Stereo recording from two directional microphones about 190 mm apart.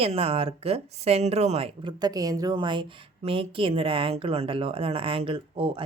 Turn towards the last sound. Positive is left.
turn(degrees=-30)  # may be behind; listen again after turning